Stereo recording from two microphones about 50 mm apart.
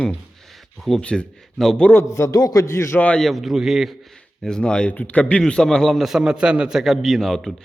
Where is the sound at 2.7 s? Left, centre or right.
Left.